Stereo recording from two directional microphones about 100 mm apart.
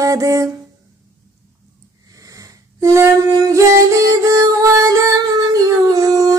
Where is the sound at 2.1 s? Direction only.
35° right (ahead or behind).